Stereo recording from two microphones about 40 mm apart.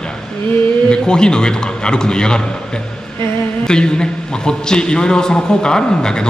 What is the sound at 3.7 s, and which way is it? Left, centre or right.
A man's voice, left.